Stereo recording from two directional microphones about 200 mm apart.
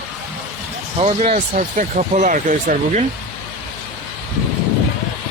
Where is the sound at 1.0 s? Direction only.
30° right (ahead or behind).